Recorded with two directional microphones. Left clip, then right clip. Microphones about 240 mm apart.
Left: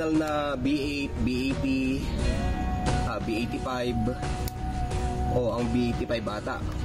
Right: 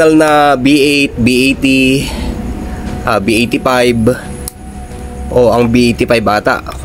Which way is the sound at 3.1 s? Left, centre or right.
Right.